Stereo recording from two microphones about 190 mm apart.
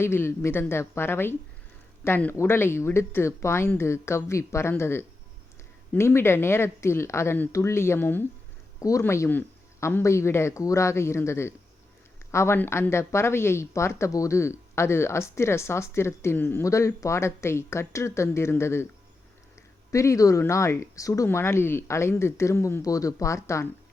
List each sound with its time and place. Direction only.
0.0 s speech: 15° left (ahead or behind)
19.9 s speech: 15° left (ahead or behind)